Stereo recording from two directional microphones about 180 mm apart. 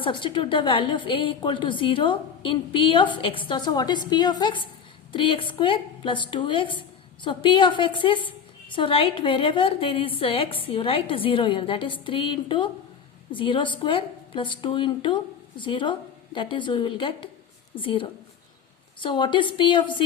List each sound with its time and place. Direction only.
0.0 s a woman's voice: 30° left (ahead or behind)